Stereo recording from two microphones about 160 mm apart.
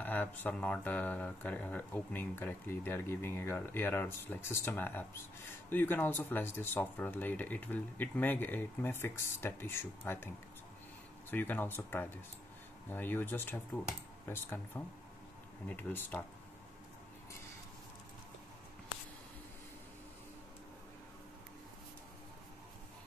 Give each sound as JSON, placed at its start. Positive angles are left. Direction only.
{"t": 0.0, "sound": "speech", "side_deg": 10}